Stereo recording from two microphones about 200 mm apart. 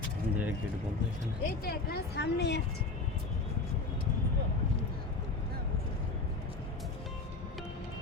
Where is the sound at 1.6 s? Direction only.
50° left (ahead or behind).